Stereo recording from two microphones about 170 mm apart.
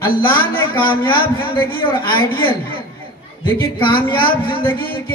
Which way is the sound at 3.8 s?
30° left (ahead or behind).